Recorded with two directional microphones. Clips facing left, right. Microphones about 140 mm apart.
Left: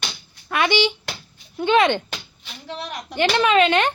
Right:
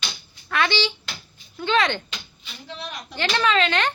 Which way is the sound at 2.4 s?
65° left (ahead or behind).